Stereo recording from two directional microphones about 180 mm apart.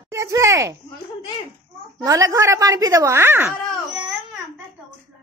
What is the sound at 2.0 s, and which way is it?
A woman's voice, 20° right (ahead or behind).